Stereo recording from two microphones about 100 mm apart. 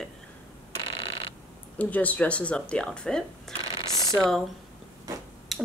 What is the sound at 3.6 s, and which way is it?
Mechanisms, 45° left (ahead or behind).